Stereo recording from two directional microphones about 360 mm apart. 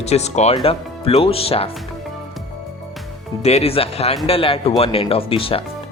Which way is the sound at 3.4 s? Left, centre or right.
Centre.